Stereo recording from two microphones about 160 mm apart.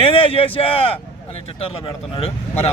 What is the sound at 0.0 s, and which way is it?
Speech, 35° left (ahead or behind).